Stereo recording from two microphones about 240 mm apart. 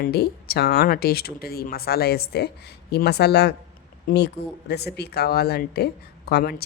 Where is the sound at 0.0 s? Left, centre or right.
Left.